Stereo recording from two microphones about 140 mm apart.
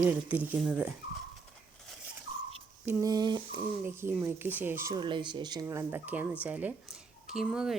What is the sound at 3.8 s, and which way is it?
Speech, 15° right (ahead or behind).